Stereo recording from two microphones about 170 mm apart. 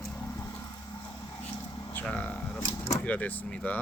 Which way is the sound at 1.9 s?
10° left (ahead or behind).